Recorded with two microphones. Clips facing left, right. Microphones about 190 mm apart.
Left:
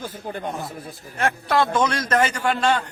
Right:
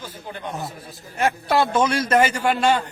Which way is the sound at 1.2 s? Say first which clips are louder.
Right 1 dB; 5° right (ahead or behind).